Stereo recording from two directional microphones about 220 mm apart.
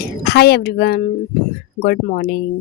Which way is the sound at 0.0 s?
45° left (ahead or behind).